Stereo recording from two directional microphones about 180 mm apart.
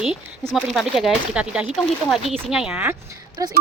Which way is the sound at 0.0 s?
Centre (ahead or behind).